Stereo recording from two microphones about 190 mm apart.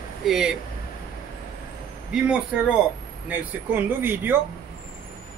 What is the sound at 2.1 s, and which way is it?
A man's voice, 5° right (ahead or behind).